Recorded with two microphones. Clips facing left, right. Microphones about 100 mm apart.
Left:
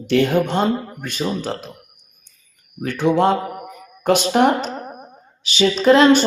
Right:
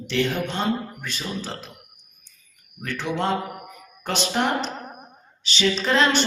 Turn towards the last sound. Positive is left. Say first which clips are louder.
# left 9 dB
turn(degrees=40)  # may be behind; listen again after turning